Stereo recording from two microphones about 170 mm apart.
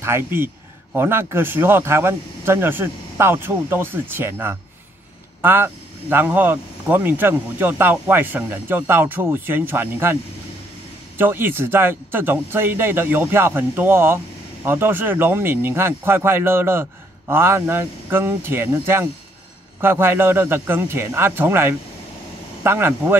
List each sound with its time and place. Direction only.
0.0 s speech: 15° right (ahead or behind)
11.1 s speech: 10° right (ahead or behind)